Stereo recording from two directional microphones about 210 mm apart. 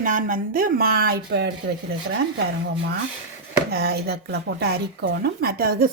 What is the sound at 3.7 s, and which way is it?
Speech, 50° right (ahead or behind).